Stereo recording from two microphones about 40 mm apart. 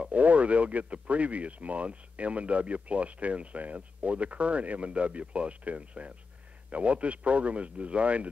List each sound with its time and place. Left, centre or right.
0.1 s speech: right